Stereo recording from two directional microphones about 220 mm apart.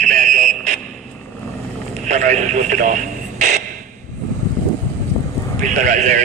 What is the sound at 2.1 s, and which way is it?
Radio, 35° right (ahead or behind).